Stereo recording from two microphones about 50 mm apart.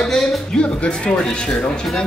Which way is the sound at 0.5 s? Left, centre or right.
Left.